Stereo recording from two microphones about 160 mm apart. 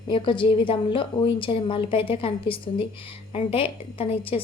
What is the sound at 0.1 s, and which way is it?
A woman's voice, 30° left (ahead or behind).